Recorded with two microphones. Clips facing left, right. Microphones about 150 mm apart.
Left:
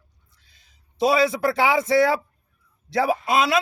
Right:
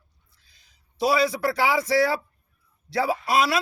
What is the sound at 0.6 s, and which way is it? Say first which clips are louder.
A man's voice: left 3 dB; 25° left (ahead or behind).